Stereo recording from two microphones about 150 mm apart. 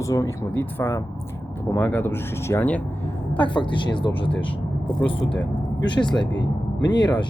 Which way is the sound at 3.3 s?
35° left (ahead or behind).